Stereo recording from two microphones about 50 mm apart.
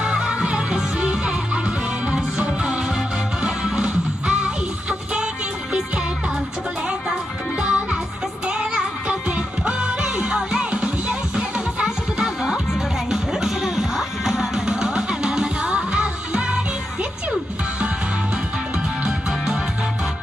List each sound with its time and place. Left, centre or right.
0.0 s music: right
7.6 s music: centre
10.6 s music: right
11.8 s music: centre
19.0 s music: centre